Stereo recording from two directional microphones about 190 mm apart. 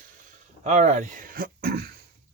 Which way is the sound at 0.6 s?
35° right (ahead or behind).